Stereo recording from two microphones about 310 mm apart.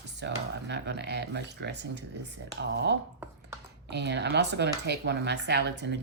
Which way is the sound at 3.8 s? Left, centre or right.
Right.